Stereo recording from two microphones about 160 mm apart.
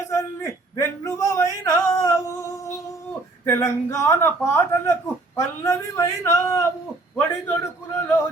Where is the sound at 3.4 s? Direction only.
15° left (ahead or behind).